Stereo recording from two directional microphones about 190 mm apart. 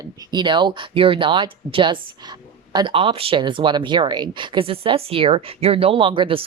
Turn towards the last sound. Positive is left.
turn(degrees=-25)  # may be behind; listen again after turning